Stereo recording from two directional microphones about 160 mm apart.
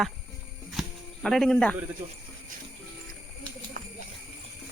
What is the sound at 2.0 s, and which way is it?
Speech, 35° right (ahead or behind).